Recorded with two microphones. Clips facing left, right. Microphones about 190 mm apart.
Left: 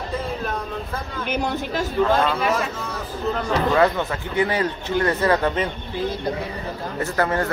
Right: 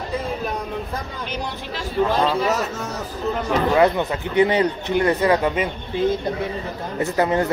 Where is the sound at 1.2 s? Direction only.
50° left (ahead or behind).